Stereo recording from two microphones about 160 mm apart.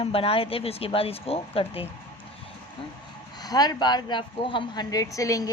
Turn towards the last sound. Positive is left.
turn(degrees=20)  # may be behind; listen again after turning